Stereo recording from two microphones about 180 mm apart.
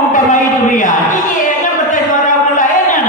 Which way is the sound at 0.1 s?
45° left (ahead or behind).